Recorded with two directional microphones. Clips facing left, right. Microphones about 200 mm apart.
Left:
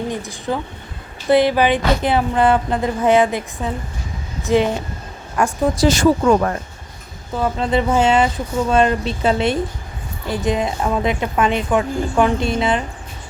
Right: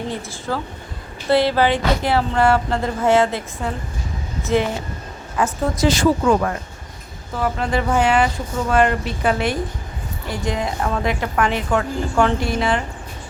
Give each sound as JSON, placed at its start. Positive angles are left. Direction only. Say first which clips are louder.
{"t": 0.1, "sound": "speech", "louder": "left 2 dB", "side_deg": 15}
{"t": 5.8, "sound": "speech", "louder": "left 2 dB", "side_deg": 45}
{"t": 7.3, "sound": "a woman's voice", "louder": "left 3 dB", "side_deg": 20}